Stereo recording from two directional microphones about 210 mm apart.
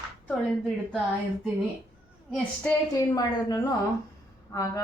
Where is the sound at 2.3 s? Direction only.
5° left (ahead or behind).